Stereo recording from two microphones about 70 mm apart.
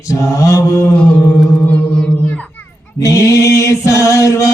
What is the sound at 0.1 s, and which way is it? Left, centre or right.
Mantra, left.